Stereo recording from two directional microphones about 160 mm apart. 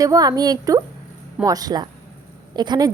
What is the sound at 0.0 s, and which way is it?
Speech, 25° right (ahead or behind).